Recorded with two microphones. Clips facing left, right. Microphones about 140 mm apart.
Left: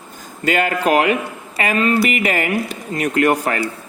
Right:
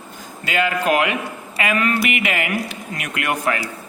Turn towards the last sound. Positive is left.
turn(degrees=40)  # may be behind; listen again after turning